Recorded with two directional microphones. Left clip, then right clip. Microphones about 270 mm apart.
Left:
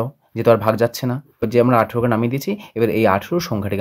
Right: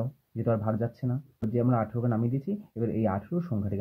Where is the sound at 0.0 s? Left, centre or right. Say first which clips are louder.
Left 15 dB; left.